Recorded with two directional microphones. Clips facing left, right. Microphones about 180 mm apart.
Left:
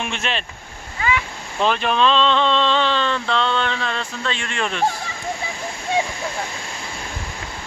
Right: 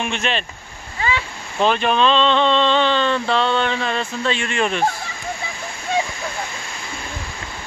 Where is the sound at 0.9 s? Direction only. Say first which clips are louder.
Left 1 dB; 30° right (ahead or behind).